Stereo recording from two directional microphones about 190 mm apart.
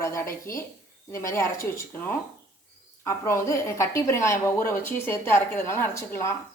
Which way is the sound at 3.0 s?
15° left (ahead or behind).